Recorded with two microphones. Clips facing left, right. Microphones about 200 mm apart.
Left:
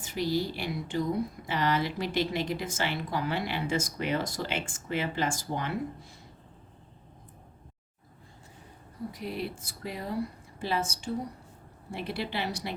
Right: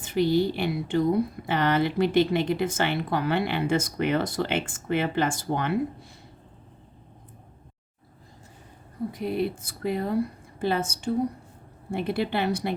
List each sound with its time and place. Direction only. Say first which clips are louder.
0.0 s a woman's voice: right 7 dB; 60° right (ahead or behind)
9.1 s a woman's voice: right 9 dB; 55° right (ahead or behind)